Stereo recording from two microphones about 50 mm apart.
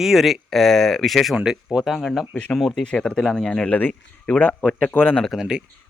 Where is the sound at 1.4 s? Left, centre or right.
Centre.